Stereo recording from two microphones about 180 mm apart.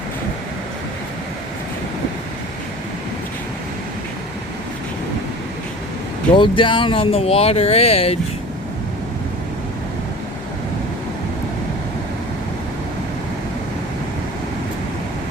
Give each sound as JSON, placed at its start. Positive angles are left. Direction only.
{"t": 6.3, "sound": "speech", "side_deg": 25}